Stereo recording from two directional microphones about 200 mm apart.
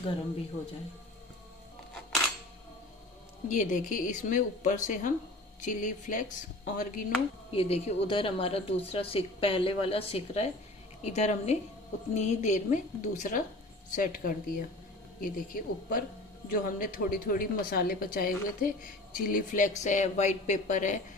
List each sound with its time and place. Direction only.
3.4 s a woman's voice: 40° left (ahead or behind)
7.5 s a woman's voice: 30° left (ahead or behind)